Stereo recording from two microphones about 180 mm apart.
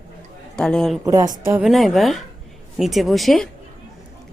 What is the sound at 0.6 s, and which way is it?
Speech, 5° left (ahead or behind).